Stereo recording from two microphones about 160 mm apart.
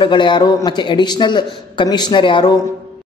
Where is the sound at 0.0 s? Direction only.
30° left (ahead or behind).